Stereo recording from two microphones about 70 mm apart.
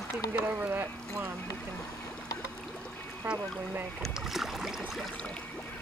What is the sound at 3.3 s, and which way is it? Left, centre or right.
Speech, right.